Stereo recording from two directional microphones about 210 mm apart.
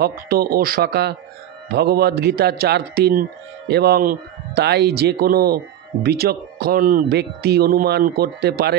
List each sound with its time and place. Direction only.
0.0 s speech: 45° right (ahead or behind)